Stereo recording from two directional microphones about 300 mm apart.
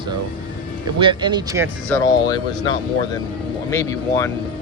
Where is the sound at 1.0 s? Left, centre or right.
Centre.